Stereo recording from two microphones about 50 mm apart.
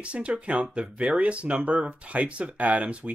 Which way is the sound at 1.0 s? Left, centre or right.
Right.